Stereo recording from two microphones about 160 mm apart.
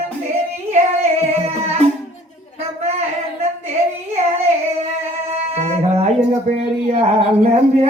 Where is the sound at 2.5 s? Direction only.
40° right (ahead or behind).